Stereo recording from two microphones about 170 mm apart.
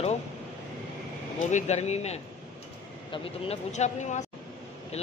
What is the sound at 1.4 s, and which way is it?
Speech, 45° left (ahead or behind).